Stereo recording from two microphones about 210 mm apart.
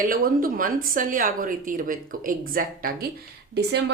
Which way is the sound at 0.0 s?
40° right (ahead or behind).